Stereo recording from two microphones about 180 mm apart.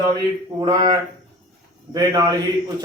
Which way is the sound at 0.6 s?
25° right (ahead or behind).